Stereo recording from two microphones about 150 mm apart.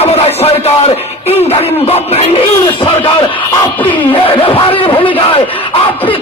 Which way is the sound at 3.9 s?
35° left (ahead or behind).